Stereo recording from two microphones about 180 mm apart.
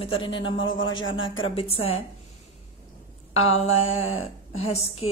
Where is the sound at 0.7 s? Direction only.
90° left.